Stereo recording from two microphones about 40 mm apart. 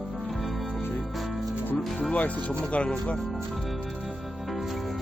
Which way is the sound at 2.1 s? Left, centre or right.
Left.